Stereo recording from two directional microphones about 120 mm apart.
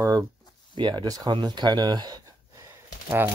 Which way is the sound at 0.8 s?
40° right (ahead or behind).